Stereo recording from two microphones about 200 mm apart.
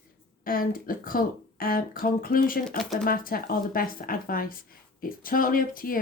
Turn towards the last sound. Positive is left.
turn(degrees=45)  # may be behind; listen again after turning